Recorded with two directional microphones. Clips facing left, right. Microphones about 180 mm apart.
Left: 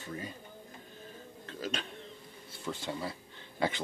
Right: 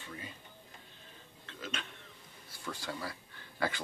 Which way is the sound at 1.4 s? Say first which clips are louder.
Left 5 dB; 40° left (ahead or behind).